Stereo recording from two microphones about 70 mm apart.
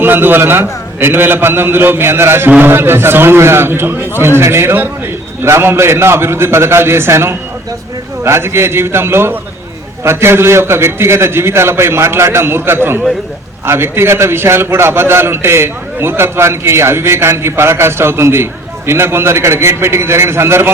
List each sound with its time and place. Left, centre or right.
0.0 s a man's voice: right